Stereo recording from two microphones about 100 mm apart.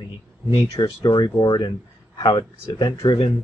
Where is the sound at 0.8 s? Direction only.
45° left (ahead or behind).